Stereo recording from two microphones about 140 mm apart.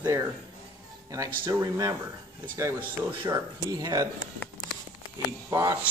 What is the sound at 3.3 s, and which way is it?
Speech, 25° right (ahead or behind).